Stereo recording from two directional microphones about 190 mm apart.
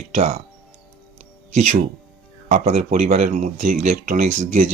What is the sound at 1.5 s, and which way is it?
Speech, 40° right (ahead or behind).